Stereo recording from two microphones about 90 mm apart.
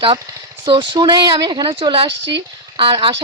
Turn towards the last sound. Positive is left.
turn(degrees=-70)  # may be behind; listen again after turning